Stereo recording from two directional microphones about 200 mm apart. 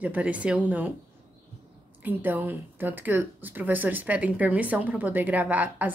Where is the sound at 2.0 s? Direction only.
10° right (ahead or behind).